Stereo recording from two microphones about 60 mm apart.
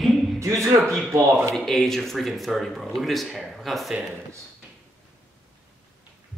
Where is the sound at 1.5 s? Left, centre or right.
Centre.